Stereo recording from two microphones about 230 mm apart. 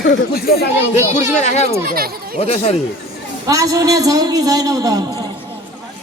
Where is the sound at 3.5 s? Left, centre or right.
Centre.